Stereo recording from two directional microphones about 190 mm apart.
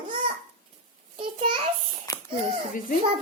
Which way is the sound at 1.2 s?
25° right (ahead or behind).